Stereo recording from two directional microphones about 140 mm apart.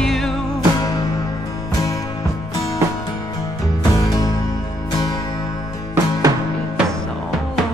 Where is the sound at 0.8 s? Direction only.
25° left (ahead or behind).